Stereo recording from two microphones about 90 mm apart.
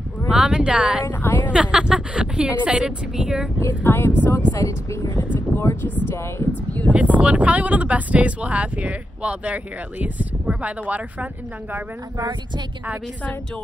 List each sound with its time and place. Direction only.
0.3 s speech: 10° right (ahead or behind)
1.0 s a sound: 20° left (ahead or behind)
1.5 s speech: 10° right (ahead or behind)
3.5 s speech: 25° left (ahead or behind)
4.5 s speech: 35° left (ahead or behind); by 6.9 s 20° left (ahead or behind)
6.9 s speech: 15° right (ahead or behind)